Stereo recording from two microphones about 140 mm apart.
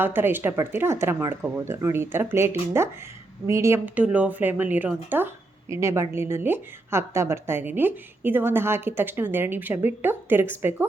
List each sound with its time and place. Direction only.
0.0 s speech: 15° right (ahead or behind)